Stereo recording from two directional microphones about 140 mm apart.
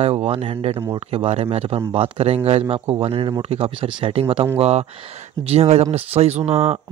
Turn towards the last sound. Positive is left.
turn(degrees=-50)  # may be behind; listen again after turning